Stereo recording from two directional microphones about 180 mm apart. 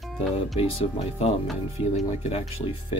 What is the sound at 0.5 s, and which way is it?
Speech, 30° left (ahead or behind).